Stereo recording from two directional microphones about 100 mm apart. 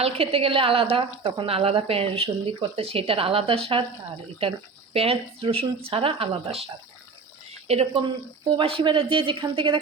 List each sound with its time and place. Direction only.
0.0 s a woman's voice: 75° right (ahead or behind)
4.9 s a woman's voice: 70° right (ahead or behind)
8.5 s speech: 60° right (ahead or behind)